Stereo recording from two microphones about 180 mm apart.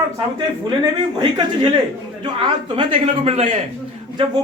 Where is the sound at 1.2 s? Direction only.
25° right (ahead or behind).